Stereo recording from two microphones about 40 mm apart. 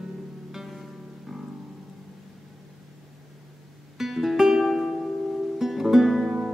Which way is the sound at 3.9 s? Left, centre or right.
Centre.